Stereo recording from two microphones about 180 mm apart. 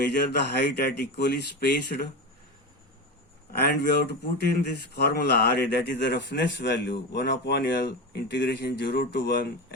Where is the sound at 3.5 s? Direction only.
60° left (ahead or behind).